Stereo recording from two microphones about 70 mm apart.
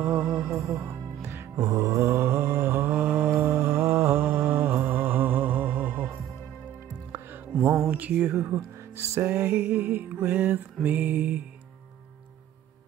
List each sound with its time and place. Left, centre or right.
0.0 s music: right
1.6 s mantra: right
3.2 s mantra: right
8.1 s music: right
8.5 s music: right